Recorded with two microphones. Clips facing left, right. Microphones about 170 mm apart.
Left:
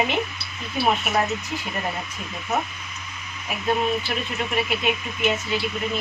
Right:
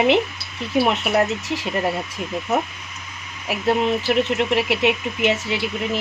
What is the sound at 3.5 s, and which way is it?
Speech, 80° right.